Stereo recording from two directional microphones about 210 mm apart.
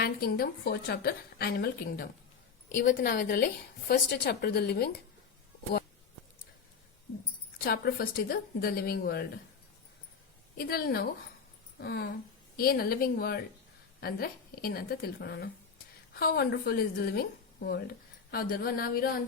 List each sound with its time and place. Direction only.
0.0 s a woman's voice: 45° left (ahead or behind)
7.6 s a woman's voice: 45° left (ahead or behind)
10.6 s a woman's voice: 45° left (ahead or behind)